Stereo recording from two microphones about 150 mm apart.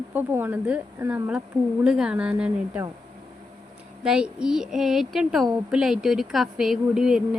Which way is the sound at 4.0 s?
5° right (ahead or behind).